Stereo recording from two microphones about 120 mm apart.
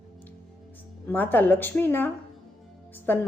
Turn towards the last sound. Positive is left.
turn(degrees=15)  # may be behind; listen again after turning